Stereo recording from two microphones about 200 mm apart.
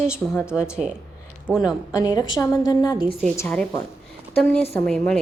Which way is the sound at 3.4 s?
10° left (ahead or behind).